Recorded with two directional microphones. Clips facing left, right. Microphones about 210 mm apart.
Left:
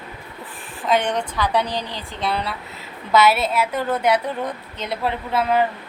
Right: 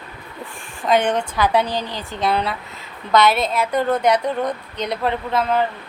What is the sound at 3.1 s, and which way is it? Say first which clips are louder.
A woman's voice: even; 5° left (ahead or behind).